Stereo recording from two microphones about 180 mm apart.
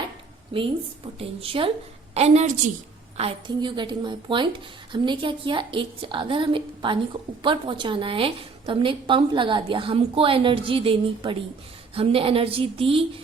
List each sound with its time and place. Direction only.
0.5 s a woman's voice: 30° right (ahead or behind)